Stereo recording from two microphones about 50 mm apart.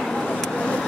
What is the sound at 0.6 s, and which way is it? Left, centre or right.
Vehicle, left.